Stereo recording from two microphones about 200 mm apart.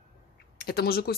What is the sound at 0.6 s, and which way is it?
Speech, 50° left (ahead or behind).